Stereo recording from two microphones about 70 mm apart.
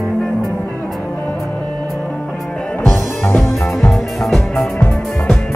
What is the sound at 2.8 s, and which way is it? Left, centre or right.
Music, left.